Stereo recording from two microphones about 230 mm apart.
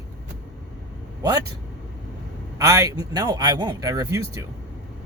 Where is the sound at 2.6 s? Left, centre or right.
Centre.